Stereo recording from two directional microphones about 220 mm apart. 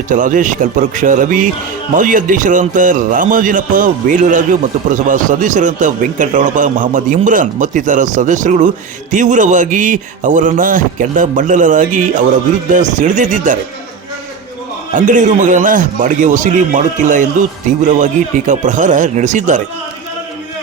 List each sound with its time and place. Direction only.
0.1 s a man's voice: 35° right (ahead or behind)
14.9 s a man's voice: 35° right (ahead or behind)